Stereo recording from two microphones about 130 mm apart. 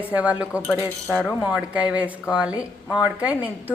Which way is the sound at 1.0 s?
10° left (ahead or behind).